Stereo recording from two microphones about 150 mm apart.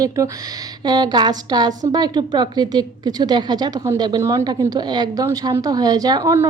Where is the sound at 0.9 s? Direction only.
25° right (ahead or behind).